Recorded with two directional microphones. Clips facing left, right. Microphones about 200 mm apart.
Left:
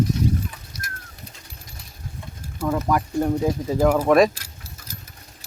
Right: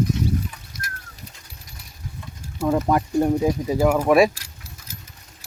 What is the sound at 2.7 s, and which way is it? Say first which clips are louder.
Speech: right 3 dB; 25° right (ahead or behind).